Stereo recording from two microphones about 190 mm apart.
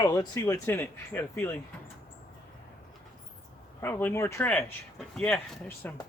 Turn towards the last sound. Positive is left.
turn(degrees=10)  # may be behind; listen again after turning